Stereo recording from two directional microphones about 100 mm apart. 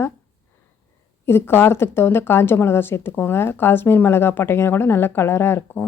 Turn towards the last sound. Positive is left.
turn(degrees=20)  # may be behind; listen again after turning